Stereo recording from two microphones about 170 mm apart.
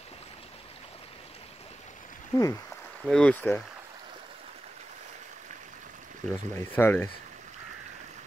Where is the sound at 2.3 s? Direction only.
20° left (ahead or behind).